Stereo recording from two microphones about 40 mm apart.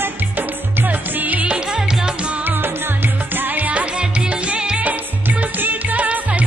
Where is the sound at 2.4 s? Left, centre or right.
Right.